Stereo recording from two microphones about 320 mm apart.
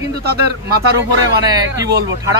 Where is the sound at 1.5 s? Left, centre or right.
Centre.